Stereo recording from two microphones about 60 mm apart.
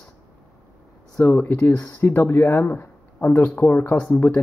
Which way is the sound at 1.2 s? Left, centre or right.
Left.